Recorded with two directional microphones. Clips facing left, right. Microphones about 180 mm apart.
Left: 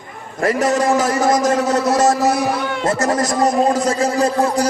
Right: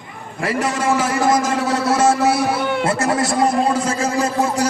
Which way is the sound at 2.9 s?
40° left (ahead or behind).